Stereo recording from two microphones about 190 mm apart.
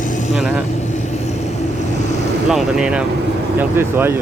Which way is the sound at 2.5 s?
5° right (ahead or behind).